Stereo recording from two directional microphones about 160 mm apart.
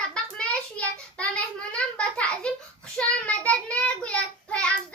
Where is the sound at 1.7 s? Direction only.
5° left (ahead or behind).